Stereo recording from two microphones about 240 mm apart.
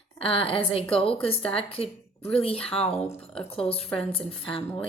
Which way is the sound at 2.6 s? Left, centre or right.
Centre.